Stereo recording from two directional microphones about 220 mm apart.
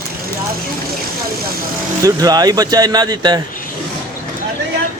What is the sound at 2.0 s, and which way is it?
Speech, 15° right (ahead or behind).